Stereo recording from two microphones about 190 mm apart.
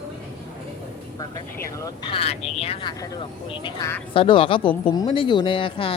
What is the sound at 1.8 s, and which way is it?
Speech, 25° left (ahead or behind).